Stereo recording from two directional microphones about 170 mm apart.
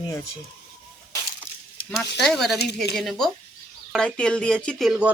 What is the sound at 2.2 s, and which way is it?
Speech, centre (ahead or behind).